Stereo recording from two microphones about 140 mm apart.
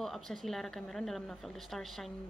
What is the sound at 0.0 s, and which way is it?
Speech, centre (ahead or behind).